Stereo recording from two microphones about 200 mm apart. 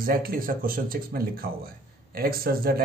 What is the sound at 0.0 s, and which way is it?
Speech, 45° right (ahead or behind).